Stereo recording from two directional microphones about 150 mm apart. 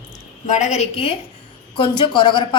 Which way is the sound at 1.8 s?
30° left (ahead or behind).